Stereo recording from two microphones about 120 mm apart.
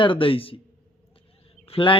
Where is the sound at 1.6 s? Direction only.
50° left (ahead or behind).